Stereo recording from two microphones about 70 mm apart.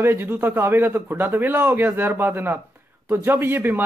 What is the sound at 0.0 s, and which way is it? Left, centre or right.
Speech, right.